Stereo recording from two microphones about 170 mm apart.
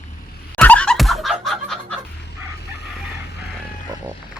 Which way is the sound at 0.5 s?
10° left (ahead or behind).